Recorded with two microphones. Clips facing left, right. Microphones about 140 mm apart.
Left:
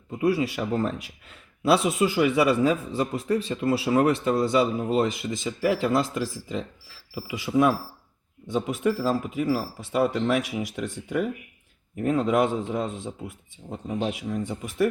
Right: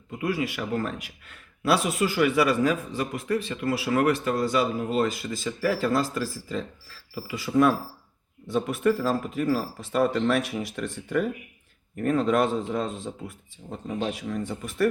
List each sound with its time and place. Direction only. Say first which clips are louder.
0.2 s a man's voice: left 4 dB; 35° left (ahead or behind); by 14.8 s 15° left (ahead or behind)